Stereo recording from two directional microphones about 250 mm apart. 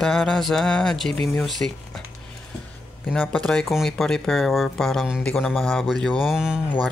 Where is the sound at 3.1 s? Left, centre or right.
Centre.